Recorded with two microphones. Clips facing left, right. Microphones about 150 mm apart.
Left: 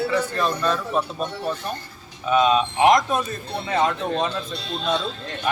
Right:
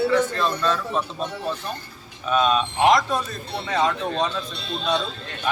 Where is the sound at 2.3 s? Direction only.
15° left (ahead or behind).